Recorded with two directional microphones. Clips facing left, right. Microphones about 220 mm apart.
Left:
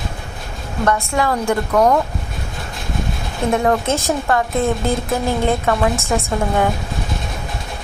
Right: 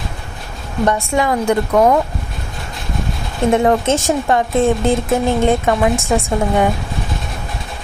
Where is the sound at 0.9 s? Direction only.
20° right (ahead or behind).